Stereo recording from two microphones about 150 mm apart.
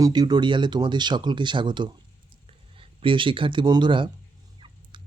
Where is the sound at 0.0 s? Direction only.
25° right (ahead or behind).